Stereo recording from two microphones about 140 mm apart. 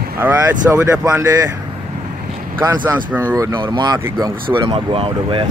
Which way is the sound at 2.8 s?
10° right (ahead or behind).